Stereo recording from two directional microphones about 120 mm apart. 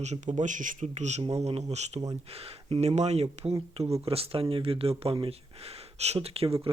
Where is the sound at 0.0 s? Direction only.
80° right.